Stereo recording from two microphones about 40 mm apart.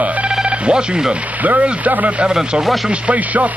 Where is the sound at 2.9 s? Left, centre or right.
Right.